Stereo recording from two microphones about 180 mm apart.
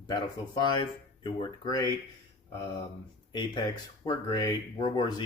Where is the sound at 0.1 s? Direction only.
25° left (ahead or behind).